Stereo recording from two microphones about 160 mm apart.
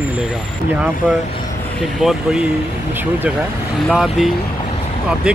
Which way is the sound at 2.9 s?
10° right (ahead or behind).